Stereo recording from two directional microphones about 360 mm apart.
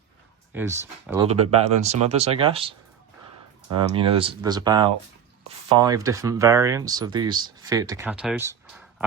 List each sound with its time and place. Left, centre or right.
0.5 s speech: centre